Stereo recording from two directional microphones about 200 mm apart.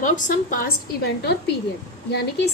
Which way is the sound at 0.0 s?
40° left (ahead or behind).